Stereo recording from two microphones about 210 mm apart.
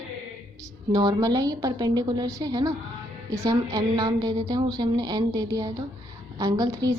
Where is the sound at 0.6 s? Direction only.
15° right (ahead or behind).